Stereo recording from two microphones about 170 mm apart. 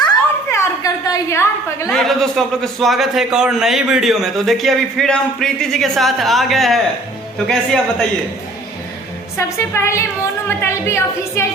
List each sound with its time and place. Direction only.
0.4 s a sound: 15° left (ahead or behind)
1.9 s a man's voice: 5° left (ahead or behind)
9.6 s a woman's voice: 15° left (ahead or behind)